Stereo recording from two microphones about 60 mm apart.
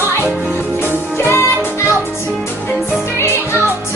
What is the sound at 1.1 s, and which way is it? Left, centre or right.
Music, left.